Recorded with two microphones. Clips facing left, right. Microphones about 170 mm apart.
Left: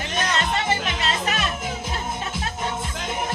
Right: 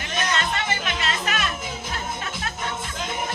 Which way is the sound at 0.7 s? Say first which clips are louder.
Left 3 dB; 35° left (ahead or behind).